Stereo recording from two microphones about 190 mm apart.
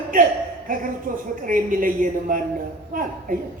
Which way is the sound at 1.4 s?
45° right (ahead or behind).